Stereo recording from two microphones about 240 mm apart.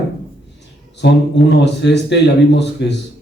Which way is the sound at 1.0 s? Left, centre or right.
Left.